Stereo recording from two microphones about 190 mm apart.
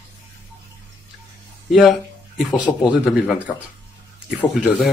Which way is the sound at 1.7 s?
Centre (ahead or behind).